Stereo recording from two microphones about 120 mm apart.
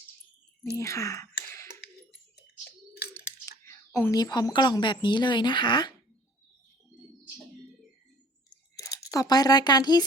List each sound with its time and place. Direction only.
0.6 s whispering: 25° left (ahead or behind)
3.4 s a woman's voice: 25° left (ahead or behind)
8.8 s speech: 30° left (ahead or behind)